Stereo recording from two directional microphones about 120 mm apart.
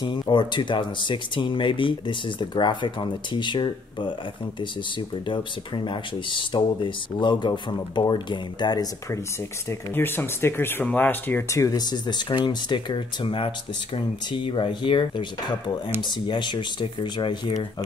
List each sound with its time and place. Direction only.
0.0 s speech: 40° left (ahead or behind)
5.9 s speech: 40° left (ahead or behind)
9.7 s speech: 20° left (ahead or behind); by 17.8 s 40° left (ahead or behind)